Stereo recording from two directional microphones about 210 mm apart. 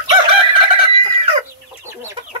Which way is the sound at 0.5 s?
25° right (ahead or behind).